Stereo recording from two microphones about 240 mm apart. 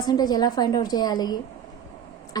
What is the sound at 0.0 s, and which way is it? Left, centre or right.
A woman's voice, centre.